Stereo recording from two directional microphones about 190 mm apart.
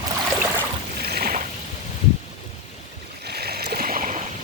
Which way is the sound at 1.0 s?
55° right (ahead or behind).